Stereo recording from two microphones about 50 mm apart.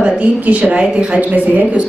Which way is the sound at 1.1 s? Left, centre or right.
Right.